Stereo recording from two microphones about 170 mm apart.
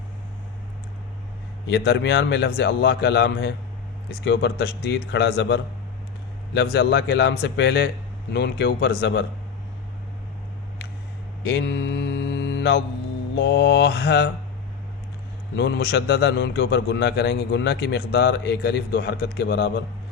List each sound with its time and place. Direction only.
1.6 s a man's voice: 80° left
4.1 s a man's voice: 90° left
8.3 s a man's voice: 75° left (ahead or behind)
11.4 s mantra: 90° left
13.3 s a man's voice: 80° left
15.5 s a man's voice: 90° left; by 19.7 s 70° left (ahead or behind)